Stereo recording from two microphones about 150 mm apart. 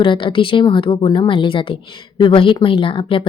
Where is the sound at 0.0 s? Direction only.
35° left (ahead or behind).